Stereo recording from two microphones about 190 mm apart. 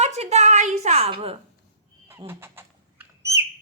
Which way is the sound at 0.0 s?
35° right (ahead or behind).